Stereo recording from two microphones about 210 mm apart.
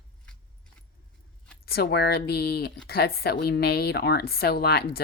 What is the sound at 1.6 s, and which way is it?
Speech, 50° left (ahead or behind).